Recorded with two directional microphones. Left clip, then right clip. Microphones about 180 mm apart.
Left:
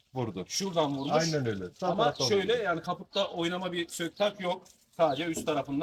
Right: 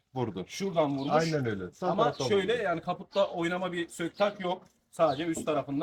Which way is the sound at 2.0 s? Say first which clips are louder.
Even; 15° right (ahead or behind).